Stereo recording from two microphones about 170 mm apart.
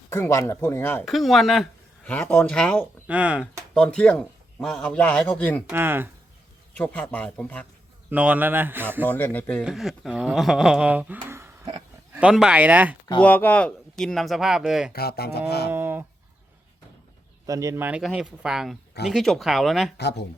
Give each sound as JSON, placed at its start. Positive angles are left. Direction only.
{"t": 0.1, "sound": "a man's voice", "side_deg": 15}
{"t": 1.0, "sound": "a man's voice", "side_deg": 0}
{"t": 3.1, "sound": "speech", "side_deg": -10}
{"t": 3.8, "sound": "a man's voice", "side_deg": 5}
{"t": 5.6, "sound": "speech", "side_deg": -15}
{"t": 6.7, "sound": "a man's voice", "side_deg": 10}
{"t": 8.1, "sound": "speech", "side_deg": -10}
{"t": 9.0, "sound": "a man's voice", "side_deg": 10}
{"t": 9.6, "sound": "speech", "side_deg": 0}
{"t": 13.2, "sound": "speech", "side_deg": 10}
{"t": 14.9, "sound": "speech", "side_deg": 65}
{"t": 15.7, "sound": "a sound", "side_deg": -15}
{"t": 17.4, "sound": "speech", "side_deg": -20}
{"t": 20.0, "sound": "speech", "side_deg": 75}